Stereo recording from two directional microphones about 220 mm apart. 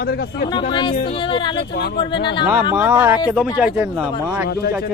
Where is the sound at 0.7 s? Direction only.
20° left (ahead or behind).